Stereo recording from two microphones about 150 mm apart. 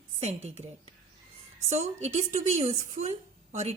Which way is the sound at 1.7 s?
50° right (ahead or behind).